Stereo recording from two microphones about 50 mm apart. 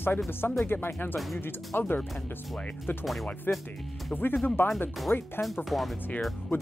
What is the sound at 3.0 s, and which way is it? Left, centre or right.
Speech, centre.